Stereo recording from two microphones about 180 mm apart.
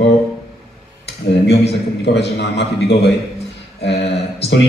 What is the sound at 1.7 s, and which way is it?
A man's voice, 70° left (ahead or behind).